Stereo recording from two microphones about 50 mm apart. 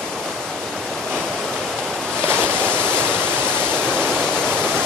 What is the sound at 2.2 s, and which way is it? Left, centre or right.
Ocean, right.